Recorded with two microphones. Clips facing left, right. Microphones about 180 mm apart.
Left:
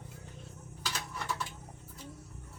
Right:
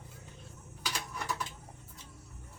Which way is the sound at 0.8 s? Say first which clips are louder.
Right 1 dB; 10° right (ahead or behind).